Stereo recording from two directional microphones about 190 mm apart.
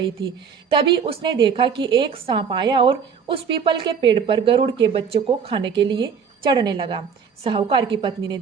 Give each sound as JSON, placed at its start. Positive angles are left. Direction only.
{"t": 0.7, "sound": "a woman's voice", "side_deg": -25}